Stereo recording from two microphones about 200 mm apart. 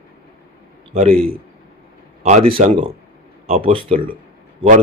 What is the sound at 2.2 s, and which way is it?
A man's voice, 30° right (ahead or behind).